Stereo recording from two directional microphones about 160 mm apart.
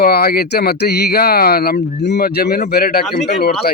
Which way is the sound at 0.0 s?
70° left (ahead or behind).